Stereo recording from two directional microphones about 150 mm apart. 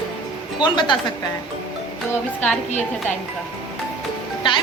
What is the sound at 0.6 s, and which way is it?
Speech, 30° left (ahead or behind).